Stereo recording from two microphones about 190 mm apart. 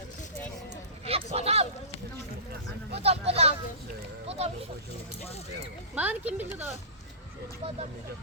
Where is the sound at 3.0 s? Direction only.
30° right (ahead or behind).